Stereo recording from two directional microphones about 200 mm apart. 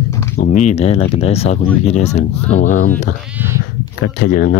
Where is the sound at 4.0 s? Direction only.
50° left (ahead or behind).